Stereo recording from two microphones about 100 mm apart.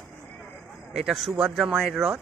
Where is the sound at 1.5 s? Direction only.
Centre (ahead or behind).